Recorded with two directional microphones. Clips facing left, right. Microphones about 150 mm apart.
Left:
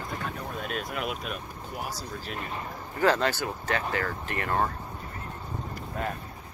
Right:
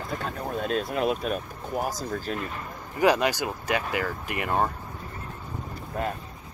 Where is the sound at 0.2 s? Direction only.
30° right (ahead or behind).